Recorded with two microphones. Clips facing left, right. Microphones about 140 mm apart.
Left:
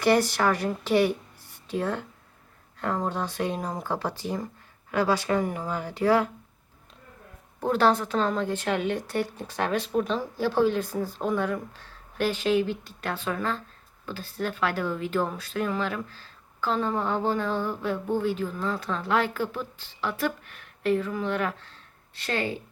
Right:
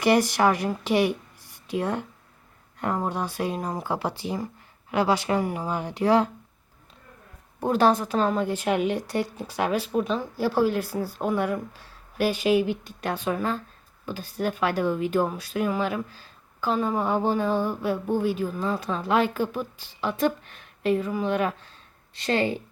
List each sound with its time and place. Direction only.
0.0 s a woman's voice: 15° right (ahead or behind)
7.6 s speech: 10° right (ahead or behind)